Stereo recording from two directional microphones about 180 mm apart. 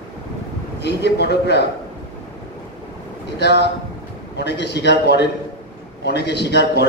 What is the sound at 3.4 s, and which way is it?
A man's voice, 65° left (ahead or behind).